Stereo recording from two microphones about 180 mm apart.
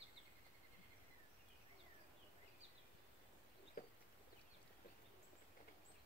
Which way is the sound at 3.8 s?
55° left (ahead or behind).